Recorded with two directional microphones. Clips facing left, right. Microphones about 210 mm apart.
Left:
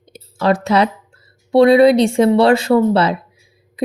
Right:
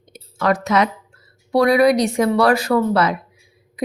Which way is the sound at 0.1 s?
30° left (ahead or behind).